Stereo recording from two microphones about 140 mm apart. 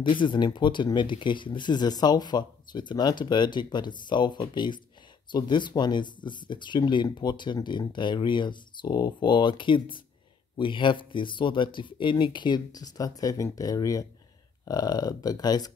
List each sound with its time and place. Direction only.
0.0 s speech: 35° left (ahead or behind)